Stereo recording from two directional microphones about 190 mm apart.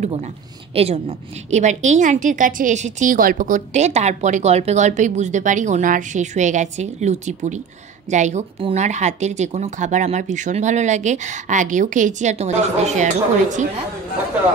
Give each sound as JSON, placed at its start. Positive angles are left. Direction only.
{"t": 0.0, "sound": "a woman's voice", "side_deg": -35}